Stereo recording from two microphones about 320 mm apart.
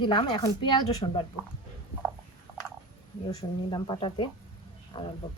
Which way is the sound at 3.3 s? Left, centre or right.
Centre.